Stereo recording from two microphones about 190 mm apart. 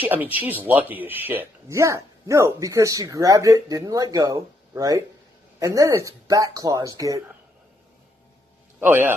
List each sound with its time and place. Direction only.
0.0 s speech: 10° right (ahead or behind)
8.8 s speech: 10° right (ahead or behind)